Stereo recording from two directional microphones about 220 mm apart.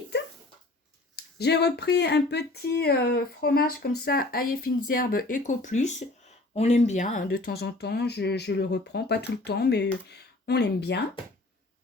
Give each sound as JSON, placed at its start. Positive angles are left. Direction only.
{"t": 1.1, "sound": "speech", "side_deg": 50}